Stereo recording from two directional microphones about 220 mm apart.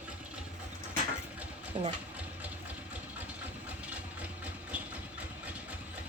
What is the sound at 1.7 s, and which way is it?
Speech, 30° right (ahead or behind).